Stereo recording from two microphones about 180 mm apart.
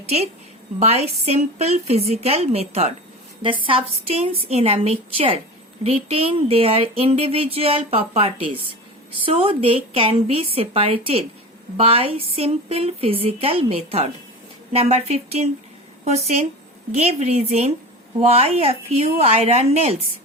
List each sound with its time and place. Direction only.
0.8 s speech: 35° right (ahead or behind)